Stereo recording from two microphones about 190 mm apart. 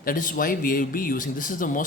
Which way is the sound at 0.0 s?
45° left (ahead or behind).